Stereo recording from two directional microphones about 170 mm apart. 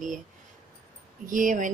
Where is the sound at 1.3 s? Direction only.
50° right (ahead or behind).